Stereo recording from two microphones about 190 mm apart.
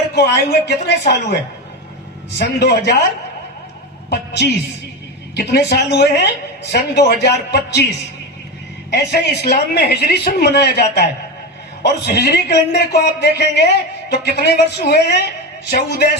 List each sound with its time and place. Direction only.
0.1 s speech: 60° left (ahead or behind)
2.4 s speech: 60° left (ahead or behind)
5.3 s speech: 60° left (ahead or behind)
8.9 s speech: 60° left (ahead or behind)